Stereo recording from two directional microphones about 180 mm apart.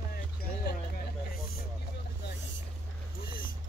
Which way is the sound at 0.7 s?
55° left (ahead or behind).